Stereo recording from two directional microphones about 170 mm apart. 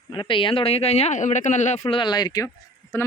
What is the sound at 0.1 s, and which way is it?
Speech, 30° left (ahead or behind).